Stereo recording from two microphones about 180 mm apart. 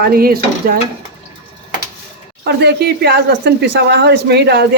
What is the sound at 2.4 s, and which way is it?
Speech, 65° right (ahead or behind).